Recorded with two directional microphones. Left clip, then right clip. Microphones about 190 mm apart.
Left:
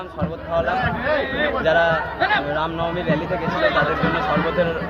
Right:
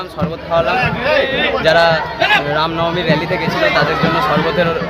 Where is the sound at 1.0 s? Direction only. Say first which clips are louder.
Right 9 dB; 60° right (ahead or behind).